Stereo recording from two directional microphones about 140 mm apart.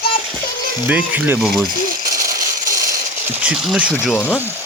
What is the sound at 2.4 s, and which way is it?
Ratchet, 25° right (ahead or behind).